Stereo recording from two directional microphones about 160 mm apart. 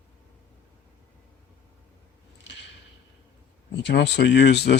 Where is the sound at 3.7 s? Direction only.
90° left.